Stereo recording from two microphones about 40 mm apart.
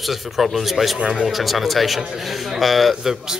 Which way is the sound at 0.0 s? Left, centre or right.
Centre.